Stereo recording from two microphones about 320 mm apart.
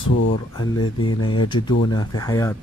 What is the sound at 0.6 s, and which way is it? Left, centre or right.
Speech, centre.